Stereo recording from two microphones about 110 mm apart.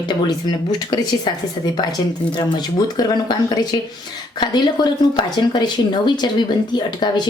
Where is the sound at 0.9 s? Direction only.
40° left (ahead or behind).